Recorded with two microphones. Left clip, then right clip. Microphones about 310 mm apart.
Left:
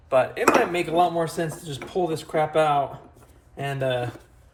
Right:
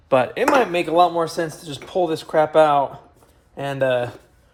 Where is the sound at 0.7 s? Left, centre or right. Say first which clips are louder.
Right 5 dB; right.